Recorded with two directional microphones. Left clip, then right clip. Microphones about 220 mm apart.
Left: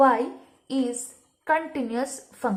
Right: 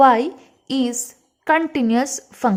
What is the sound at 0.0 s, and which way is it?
A woman's voice, 45° right (ahead or behind).